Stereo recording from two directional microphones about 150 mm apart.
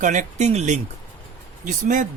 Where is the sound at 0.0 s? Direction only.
55° right (ahead or behind).